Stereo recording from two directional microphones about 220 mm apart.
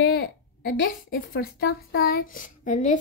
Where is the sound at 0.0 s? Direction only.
45° left (ahead or behind).